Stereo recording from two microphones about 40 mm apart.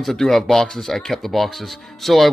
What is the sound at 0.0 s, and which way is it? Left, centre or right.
Speech, centre.